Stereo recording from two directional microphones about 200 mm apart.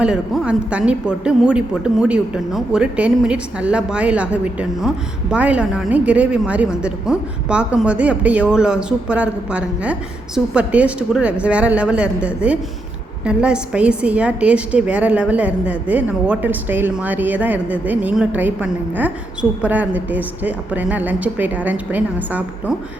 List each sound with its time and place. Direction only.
0.0 s a man's voice: 5° right (ahead or behind)